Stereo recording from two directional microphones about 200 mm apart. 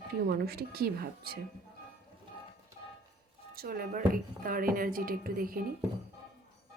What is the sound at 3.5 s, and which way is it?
A woman's voice, 50° right (ahead or behind).